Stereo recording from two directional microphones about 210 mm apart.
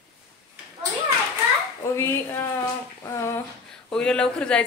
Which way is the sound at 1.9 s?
10° left (ahead or behind).